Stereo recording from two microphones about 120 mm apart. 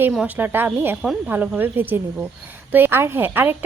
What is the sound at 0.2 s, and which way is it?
Speech, 15° right (ahead or behind).